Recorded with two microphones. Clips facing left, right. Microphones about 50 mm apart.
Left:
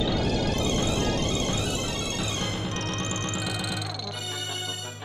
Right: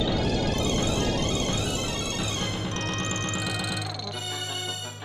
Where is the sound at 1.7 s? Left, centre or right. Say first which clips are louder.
Even; right.